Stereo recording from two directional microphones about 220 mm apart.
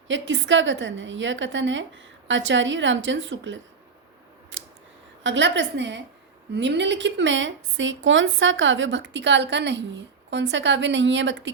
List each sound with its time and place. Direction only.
0.1 s speech: 60° right (ahead or behind)
4.5 s scissors: 60° right (ahead or behind)
5.2 s speech: 55° right (ahead or behind)